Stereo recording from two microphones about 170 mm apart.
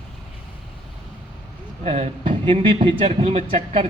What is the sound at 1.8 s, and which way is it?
Speech, 35° right (ahead or behind).